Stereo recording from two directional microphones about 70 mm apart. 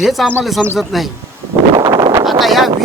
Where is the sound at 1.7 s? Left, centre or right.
Right.